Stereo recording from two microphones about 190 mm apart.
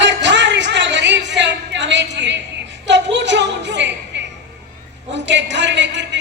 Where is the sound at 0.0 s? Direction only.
70° right (ahead or behind).